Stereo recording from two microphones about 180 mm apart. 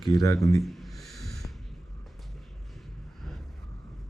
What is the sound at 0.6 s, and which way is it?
Snort, centre (ahead or behind).